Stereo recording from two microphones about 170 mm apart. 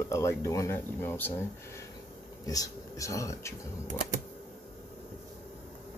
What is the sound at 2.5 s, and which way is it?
Speech, 20° left (ahead or behind).